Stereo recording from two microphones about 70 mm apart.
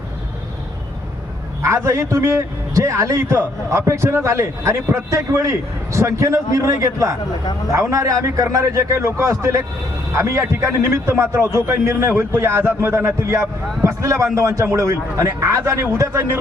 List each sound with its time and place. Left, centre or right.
1.6 s a man's voice: right